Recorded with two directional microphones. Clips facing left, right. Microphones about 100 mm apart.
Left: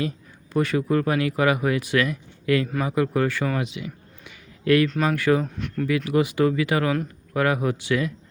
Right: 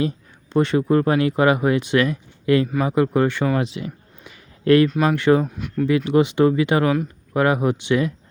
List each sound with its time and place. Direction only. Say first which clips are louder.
0.5 s speech: right 4 dB; 25° right (ahead or behind)
3.6 s a sound: right 4 dB; 35° right (ahead or behind)
4.9 s speech: right 4 dB; 10° right (ahead or behind)
5.1 s speech: right 4 dB; 25° right (ahead or behind)
5.4 s speech: right 4 dB; 10° right (ahead or behind)
6.1 s speech: right 4 dB; 25° right (ahead or behind)